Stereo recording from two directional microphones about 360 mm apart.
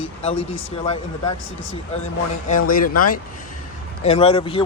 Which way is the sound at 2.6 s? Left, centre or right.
Left.